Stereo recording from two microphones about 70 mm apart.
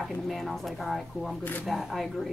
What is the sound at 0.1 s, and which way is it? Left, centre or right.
Speech, centre.